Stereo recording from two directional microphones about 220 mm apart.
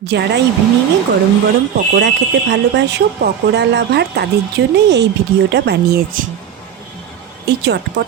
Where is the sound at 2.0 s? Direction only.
50° right (ahead or behind).